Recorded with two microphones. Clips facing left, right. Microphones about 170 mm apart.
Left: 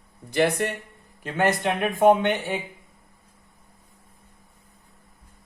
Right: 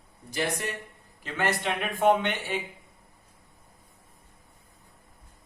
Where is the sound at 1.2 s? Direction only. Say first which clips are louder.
Left 6 dB; 45° left (ahead or behind).